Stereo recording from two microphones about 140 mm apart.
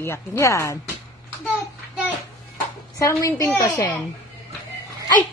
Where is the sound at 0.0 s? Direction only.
20° left (ahead or behind).